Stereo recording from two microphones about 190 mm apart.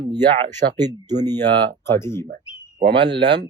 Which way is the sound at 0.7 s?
20° right (ahead or behind).